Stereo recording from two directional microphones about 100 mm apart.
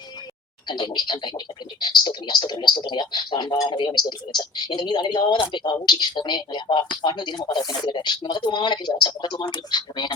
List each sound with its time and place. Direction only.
0.7 s speech: 50° left (ahead or behind)